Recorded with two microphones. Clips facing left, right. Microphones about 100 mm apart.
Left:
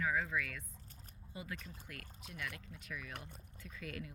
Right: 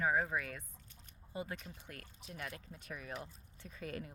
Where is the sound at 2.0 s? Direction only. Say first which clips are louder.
Right 1 dB; 60° left (ahead or behind).